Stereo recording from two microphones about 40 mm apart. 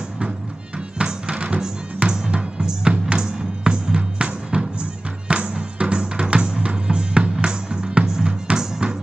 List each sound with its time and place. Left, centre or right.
0.9 s music: right
5.3 s drum: right
7.4 s music: right